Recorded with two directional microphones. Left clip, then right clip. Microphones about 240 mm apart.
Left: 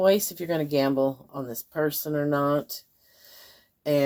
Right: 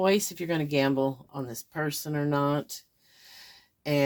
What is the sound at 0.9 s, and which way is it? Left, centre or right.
Speech, right.